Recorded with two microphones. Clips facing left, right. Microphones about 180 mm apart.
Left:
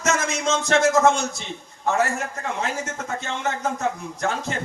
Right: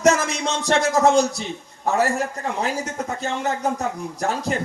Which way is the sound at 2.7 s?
35° right (ahead or behind).